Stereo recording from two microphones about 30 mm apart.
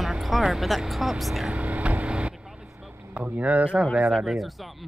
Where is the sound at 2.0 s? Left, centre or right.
Right.